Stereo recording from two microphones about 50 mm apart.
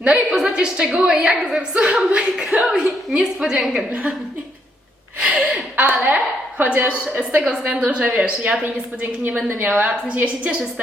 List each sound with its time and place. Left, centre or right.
0.0 s a woman's voice: right
2.6 s a woman's voice: centre
5.2 s a woman's voice: centre
5.7 s a woman's voice: right
10.2 s a woman's voice: right